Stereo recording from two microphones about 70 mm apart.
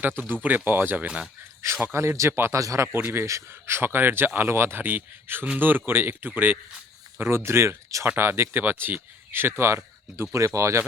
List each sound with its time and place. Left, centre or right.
0.4 s speech: right
1.0 s speech: centre
1.9 s speech: right
2.6 s speech: right
8.0 s speech: right